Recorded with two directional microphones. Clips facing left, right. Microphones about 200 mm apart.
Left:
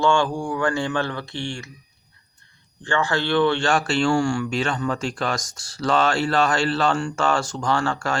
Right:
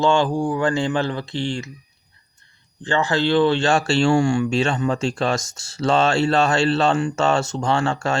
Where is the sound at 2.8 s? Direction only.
20° right (ahead or behind).